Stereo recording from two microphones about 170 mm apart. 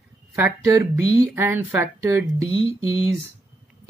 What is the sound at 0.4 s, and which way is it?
Speech, 15° right (ahead or behind).